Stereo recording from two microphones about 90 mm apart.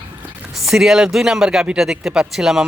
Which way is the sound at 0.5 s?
5° right (ahead or behind).